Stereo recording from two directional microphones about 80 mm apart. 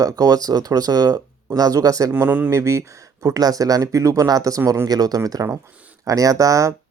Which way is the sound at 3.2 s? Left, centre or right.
Right.